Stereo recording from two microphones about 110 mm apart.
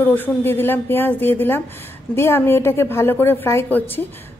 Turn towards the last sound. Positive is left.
turn(degrees=20)  # may be behind; listen again after turning